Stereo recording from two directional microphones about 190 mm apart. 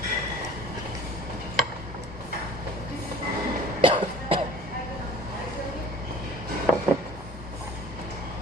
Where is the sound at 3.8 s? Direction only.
25° right (ahead or behind).